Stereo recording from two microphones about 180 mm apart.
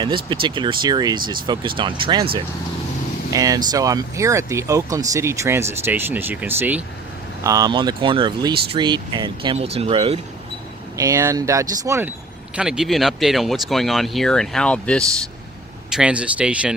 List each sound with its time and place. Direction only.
0.4 s speech: 25° right (ahead or behind); by 6.8 s 10° right (ahead or behind)
7.4 s speech: 20° right (ahead or behind)
10.9 s speech: 20° right (ahead or behind)
12.5 s speech: 5° right (ahead or behind)